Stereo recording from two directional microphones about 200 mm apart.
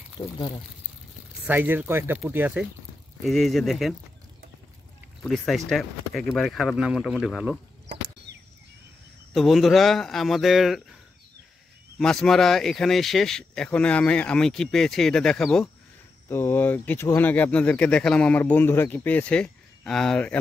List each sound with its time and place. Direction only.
0.2 s speech: 30° left (ahead or behind)
1.5 s speech: 10° right (ahead or behind)
5.2 s speech: centre (ahead or behind)
7.8 s chop: 55° right (ahead or behind)
9.3 s speech: centre (ahead or behind)
12.0 s speech: 5° left (ahead or behind)